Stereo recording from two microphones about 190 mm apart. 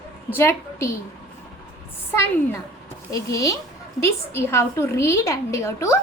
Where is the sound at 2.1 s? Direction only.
15° left (ahead or behind).